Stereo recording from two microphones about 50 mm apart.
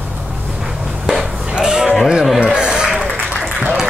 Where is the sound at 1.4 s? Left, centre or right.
Centre.